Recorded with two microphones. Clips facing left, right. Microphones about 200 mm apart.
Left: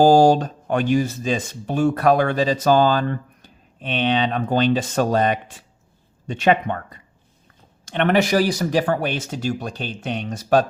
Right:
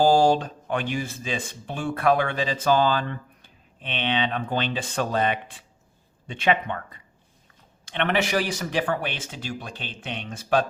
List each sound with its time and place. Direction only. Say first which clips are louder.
0.0 s speech: left 5 dB; 40° left (ahead or behind)